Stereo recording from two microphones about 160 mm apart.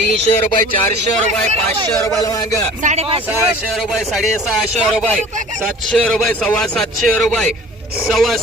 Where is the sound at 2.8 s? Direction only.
45° right (ahead or behind).